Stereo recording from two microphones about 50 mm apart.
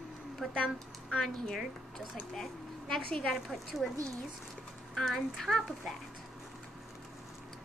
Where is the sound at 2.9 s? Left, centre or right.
Centre.